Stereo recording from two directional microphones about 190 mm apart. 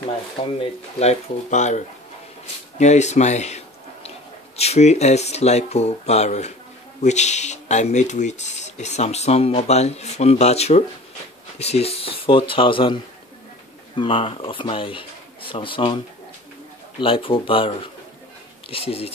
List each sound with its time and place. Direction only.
0.6 s speech: 35° left (ahead or behind)
17.0 s speech: 30° left (ahead or behind)